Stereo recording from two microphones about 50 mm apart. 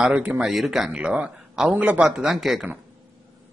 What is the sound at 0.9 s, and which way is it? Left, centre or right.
Speech, centre.